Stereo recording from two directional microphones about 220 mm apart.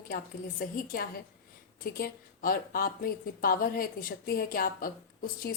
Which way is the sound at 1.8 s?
40° left (ahead or behind).